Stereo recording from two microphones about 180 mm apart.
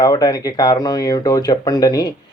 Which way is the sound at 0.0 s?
20° left (ahead or behind).